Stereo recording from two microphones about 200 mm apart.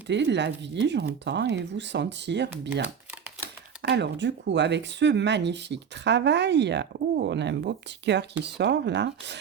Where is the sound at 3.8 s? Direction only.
60° right (ahead or behind).